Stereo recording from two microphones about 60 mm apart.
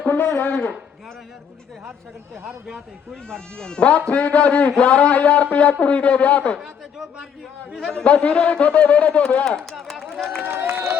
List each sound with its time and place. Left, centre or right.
0.0 s speech: left
2.6 s speech: centre
3.2 s speech: centre
7.8 s a man's voice: centre
8.0 s speech: left
9.7 s run: centre
10.4 s speech: right